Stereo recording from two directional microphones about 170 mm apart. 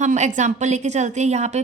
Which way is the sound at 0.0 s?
45° right (ahead or behind).